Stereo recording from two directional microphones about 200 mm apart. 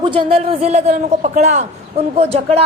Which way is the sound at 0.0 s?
25° right (ahead or behind).